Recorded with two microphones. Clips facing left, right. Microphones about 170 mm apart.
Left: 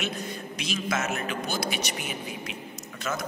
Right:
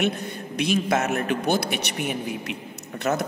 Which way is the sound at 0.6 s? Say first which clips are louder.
Right 8 dB; 60° right (ahead or behind).